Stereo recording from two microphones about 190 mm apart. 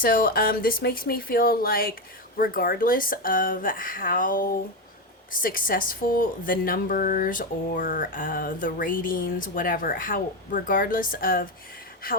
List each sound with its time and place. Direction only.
0.0 s speech: 50° left (ahead or behind)